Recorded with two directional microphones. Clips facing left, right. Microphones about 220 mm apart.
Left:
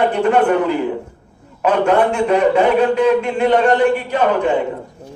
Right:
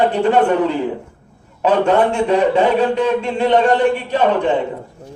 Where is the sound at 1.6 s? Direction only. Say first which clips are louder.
Even; 30° right (ahead or behind).